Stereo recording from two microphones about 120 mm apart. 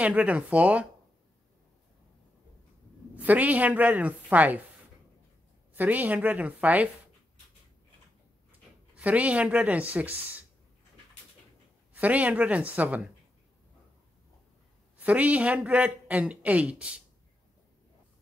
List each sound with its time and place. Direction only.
0.0 s a woman's voice: 10° right (ahead or behind)
3.2 s a woman's voice: 15° right (ahead or behind)
5.8 s a woman's voice: 15° right (ahead or behind)
8.5 s speech: 10° right (ahead or behind)
11.9 s a woman's voice: 10° right (ahead or behind)
15.0 s a woman's voice: 10° right (ahead or behind)